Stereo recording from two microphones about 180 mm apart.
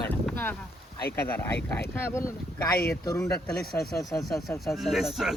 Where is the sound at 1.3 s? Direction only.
10° left (ahead or behind).